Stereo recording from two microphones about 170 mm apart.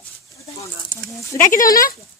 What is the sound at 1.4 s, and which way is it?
Speech, 50° left (ahead or behind).